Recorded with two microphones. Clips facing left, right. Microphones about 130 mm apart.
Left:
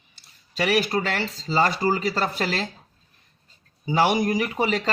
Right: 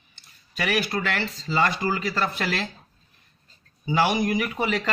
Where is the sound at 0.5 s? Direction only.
30° left (ahead or behind).